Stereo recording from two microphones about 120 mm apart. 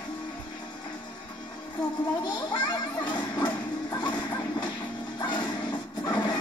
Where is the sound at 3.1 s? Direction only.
35° left (ahead or behind).